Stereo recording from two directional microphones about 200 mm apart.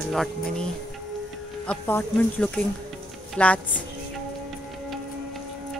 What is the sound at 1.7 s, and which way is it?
Speech, 10° left (ahead or behind).